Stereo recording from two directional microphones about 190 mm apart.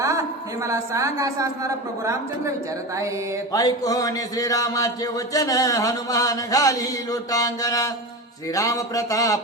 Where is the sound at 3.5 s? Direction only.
20° left (ahead or behind).